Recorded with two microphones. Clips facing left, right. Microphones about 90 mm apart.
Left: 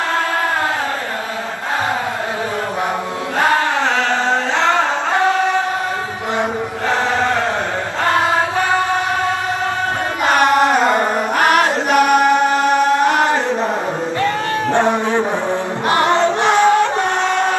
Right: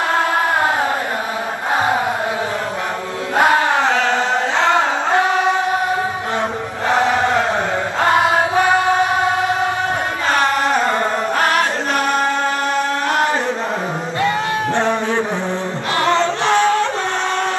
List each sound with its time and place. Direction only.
3.3 s chant: 15° right (ahead or behind)
6.9 s chant: 15° right (ahead or behind)
8.0 s choir: 20° right (ahead or behind)
10.2 s chant: 20° left (ahead or behind)
14.7 s a sound: 15° left (ahead or behind)
15.9 s music: 20° left (ahead or behind)